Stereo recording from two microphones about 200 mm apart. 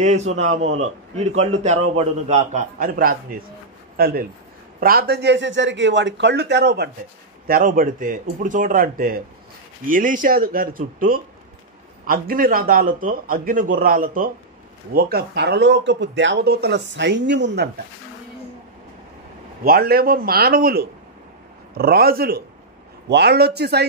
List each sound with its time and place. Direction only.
0.0 s a man's voice: 35° right (ahead or behind); by 6.9 s 55° right (ahead or behind)
7.4 s a man's voice: 45° right (ahead or behind); by 17.6 s 60° right (ahead or behind)
19.6 s a man's voice: 50° right (ahead or behind)